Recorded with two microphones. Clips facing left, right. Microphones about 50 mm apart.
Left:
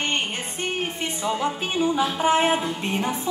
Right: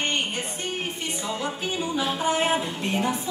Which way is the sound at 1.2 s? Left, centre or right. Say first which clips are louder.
Left 6 dB; left.